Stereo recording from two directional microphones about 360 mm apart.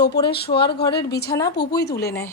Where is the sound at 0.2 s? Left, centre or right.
Centre.